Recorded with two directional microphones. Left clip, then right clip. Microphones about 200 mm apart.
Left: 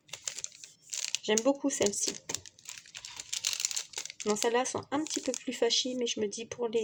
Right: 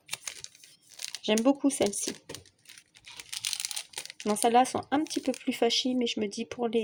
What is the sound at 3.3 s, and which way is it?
Crumpling, 15° right (ahead or behind).